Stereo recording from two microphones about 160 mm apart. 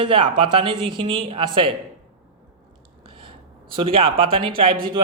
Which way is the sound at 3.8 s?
35° right (ahead or behind).